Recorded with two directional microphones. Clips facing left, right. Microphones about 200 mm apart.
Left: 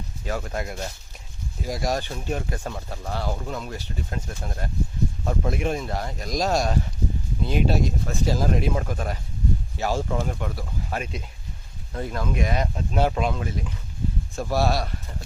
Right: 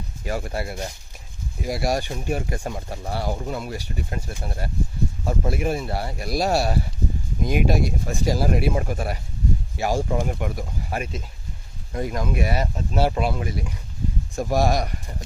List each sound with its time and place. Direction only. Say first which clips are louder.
0.3 s speech: right 1 dB; 10° right (ahead or behind)